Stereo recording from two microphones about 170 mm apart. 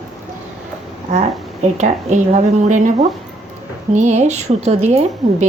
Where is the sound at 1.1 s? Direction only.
40° right (ahead or behind).